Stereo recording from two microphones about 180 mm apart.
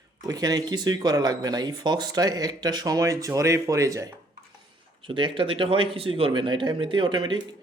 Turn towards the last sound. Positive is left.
turn(degrees=-25)  # may be behind; listen again after turning